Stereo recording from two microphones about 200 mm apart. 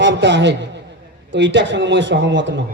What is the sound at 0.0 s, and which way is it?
A man's voice, 60° right (ahead or behind).